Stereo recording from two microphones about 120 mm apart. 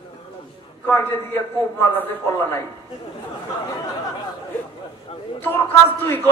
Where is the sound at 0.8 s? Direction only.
15° left (ahead or behind).